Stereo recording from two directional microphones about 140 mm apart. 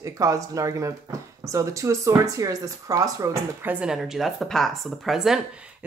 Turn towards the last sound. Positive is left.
turn(degrees=-5)  # may be behind; listen again after turning